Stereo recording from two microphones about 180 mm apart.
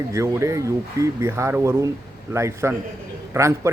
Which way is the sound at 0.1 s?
15° right (ahead or behind).